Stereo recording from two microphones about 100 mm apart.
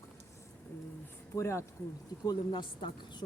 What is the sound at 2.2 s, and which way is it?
A woman's voice, 45° left (ahead or behind).